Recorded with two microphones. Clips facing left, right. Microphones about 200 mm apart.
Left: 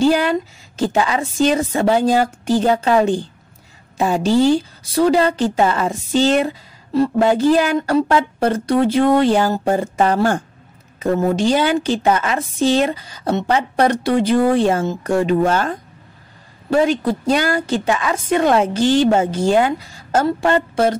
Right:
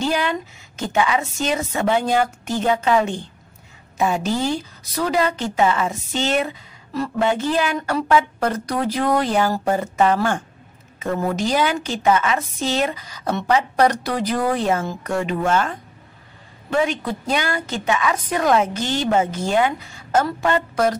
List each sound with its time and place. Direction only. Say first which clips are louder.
0.0 s speech: left 7 dB; 35° left (ahead or behind)